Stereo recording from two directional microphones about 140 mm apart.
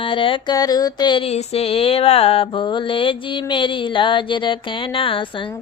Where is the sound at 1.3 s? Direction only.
45° left (ahead or behind).